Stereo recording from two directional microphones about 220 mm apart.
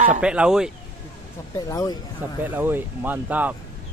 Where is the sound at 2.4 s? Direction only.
10° right (ahead or behind).